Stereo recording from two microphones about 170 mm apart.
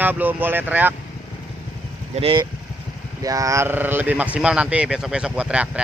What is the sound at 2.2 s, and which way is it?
Speech, 30° right (ahead or behind).